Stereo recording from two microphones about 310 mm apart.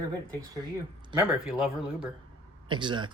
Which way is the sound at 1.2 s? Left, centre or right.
Centre.